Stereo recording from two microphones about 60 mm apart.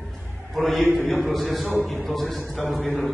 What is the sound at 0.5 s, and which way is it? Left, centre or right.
A man's voice, centre.